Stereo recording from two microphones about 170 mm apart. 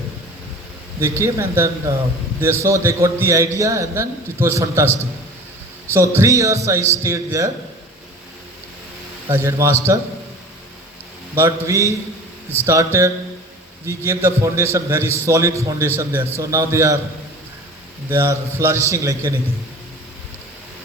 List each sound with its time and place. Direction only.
0.9 s a man's voice: 15° right (ahead or behind)
5.9 s a man's voice: 15° right (ahead or behind)
9.3 s a man's voice: 15° right (ahead or behind)
11.3 s a man's voice: 15° right (ahead or behind)
18.1 s a man's voice: 15° right (ahead or behind)